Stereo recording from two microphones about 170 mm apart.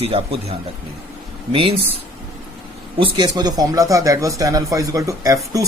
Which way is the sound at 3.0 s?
25° right (ahead or behind).